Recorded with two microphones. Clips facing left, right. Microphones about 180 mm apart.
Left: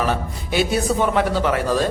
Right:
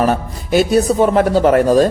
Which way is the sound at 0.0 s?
45° right (ahead or behind).